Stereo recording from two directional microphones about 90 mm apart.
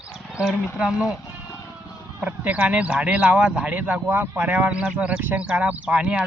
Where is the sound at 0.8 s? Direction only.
5° right (ahead or behind).